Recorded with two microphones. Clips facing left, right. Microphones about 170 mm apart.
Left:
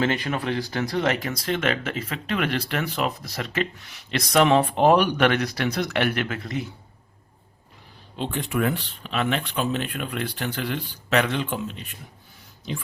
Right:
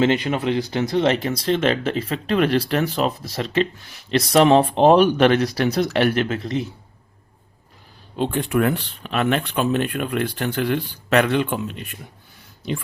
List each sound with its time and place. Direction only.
0.0 s speech: 20° right (ahead or behind)
8.2 s speech: 55° right (ahead or behind)